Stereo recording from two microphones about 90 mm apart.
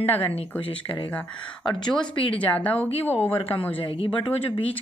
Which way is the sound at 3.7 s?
85° left.